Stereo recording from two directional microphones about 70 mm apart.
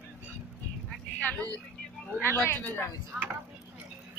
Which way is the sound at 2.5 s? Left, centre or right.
Left.